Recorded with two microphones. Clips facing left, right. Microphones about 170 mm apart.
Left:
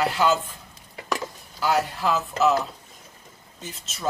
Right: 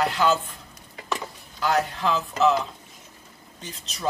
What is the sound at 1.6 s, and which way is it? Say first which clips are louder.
Speech: even; 5° left (ahead or behind).